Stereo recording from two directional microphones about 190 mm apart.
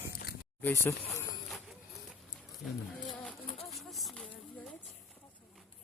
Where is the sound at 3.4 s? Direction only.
30° left (ahead or behind).